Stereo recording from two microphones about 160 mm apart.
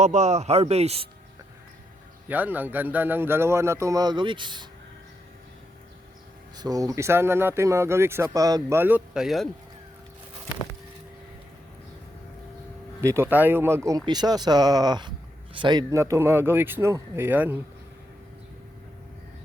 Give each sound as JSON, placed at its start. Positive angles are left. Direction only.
{"t": 0.0, "sound": "a man's voice", "side_deg": -50}
{"t": 2.2, "sound": "speech", "side_deg": -10}
{"t": 6.6, "sound": "speech", "side_deg": -25}
{"t": 13.0, "sound": "speech", "side_deg": -15}